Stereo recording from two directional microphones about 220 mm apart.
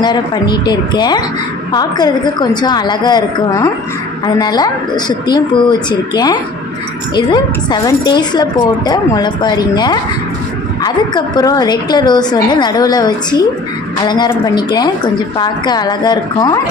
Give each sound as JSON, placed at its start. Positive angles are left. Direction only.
{"t": 0.0, "sound": "a woman's voice", "side_deg": 20}